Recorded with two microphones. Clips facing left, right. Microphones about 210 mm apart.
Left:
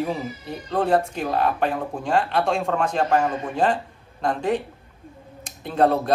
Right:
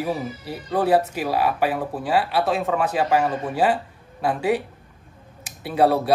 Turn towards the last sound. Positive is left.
turn(degrees=-5)  # may be behind; listen again after turning